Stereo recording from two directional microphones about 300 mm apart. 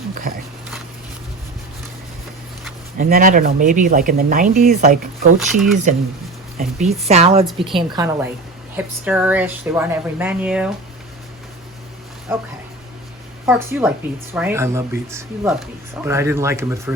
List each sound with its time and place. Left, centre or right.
0.1 s speech: right
3.0 s speech: right
5.4 s speech: centre
6.6 s speech: right; by 10.7 s centre
13.4 s speech: centre